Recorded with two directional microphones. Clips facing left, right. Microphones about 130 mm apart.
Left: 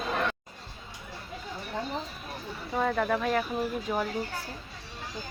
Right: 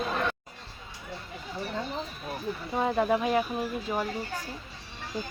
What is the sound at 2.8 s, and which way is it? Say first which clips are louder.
Speech: right 1 dB; 15° right (ahead or behind).